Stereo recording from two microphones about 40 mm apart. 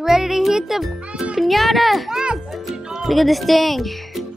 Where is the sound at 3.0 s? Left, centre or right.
Centre.